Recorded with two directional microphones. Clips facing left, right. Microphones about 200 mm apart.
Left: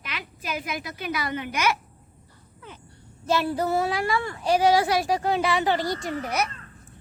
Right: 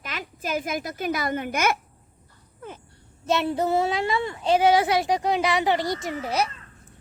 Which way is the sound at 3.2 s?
25° right (ahead or behind).